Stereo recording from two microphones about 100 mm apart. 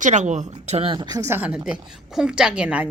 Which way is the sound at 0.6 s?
80° right.